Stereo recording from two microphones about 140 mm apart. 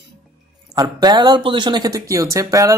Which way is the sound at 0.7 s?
30° right (ahead or behind).